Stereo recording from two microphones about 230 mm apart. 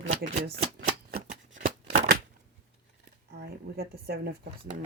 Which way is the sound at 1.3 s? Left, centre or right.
Right.